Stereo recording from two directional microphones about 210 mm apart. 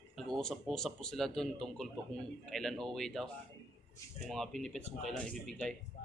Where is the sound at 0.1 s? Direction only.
Centre (ahead or behind).